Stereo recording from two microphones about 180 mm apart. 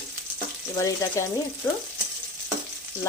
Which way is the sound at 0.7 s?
15° left (ahead or behind).